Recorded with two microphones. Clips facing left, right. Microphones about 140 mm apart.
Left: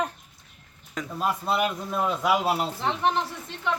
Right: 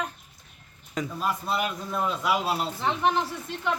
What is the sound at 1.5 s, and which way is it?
A man's voice, 25° left (ahead or behind).